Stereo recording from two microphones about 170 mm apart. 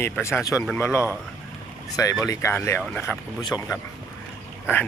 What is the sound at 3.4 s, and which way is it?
Speech, 25° left (ahead or behind).